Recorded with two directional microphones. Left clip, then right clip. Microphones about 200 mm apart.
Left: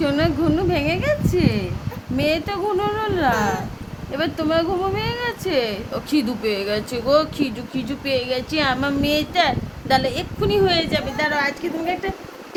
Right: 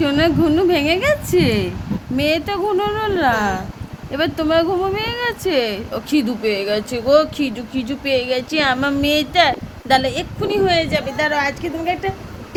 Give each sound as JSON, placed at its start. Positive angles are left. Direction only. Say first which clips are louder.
{"t": 0.0, "sound": "a sound", "louder": "right 4 dB", "side_deg": -10}
{"t": 2.1, "sound": "speech", "louder": "right 3 dB", "side_deg": -15}
{"t": 10.4, "sound": "speech", "louder": "right 1 dB", "side_deg": -5}